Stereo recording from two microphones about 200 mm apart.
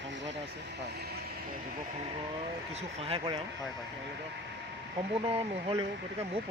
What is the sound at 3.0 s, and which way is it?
Speech, 30° right (ahead or behind).